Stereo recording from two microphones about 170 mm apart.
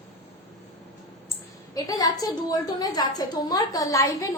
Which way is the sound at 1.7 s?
20° left (ahead or behind).